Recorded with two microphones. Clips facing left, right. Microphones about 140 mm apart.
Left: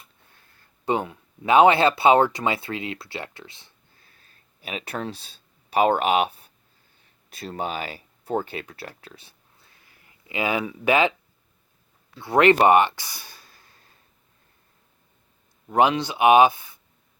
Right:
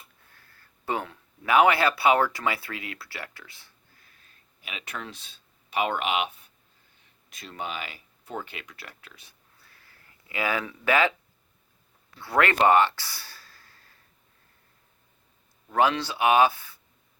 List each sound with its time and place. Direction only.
0.3 s speech: 20° left (ahead or behind)
12.2 s speech: 20° left (ahead or behind)
15.7 s speech: 15° left (ahead or behind)